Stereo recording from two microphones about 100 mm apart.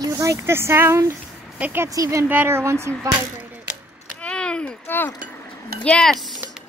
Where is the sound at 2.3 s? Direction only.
20° right (ahead or behind).